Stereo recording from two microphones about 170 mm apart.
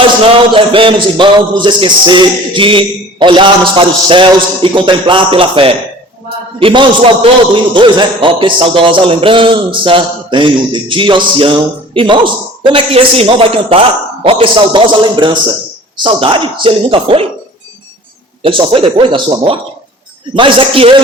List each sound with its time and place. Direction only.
0.2 s a man's voice: 30° right (ahead or behind)
18.4 s a man's voice: 30° right (ahead or behind)